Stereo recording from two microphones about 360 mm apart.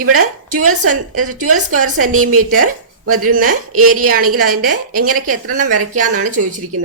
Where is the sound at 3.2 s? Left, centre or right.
Right.